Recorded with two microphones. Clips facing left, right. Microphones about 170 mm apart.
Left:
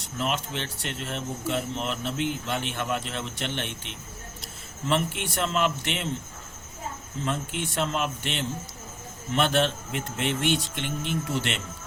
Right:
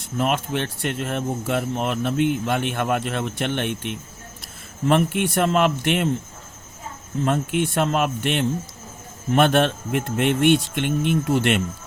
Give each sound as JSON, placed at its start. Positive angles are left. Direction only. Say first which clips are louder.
{"t": 0.0, "sound": "speech", "louder": "right 6 dB", "side_deg": -55}
{"t": 7.3, "sound": "speech", "louder": "right 8 dB", "side_deg": -55}